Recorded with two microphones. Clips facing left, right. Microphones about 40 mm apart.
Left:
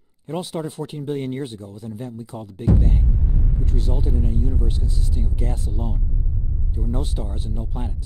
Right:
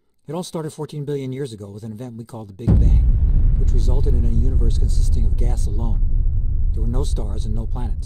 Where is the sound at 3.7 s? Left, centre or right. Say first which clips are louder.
Right 2 dB; centre.